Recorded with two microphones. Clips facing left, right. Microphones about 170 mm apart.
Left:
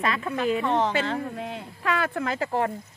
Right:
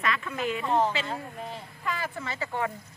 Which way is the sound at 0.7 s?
70° left (ahead or behind).